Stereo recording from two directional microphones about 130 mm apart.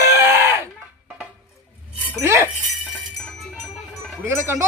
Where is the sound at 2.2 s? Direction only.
20° right (ahead or behind).